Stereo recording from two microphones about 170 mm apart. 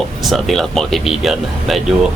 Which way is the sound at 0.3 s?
Centre (ahead or behind).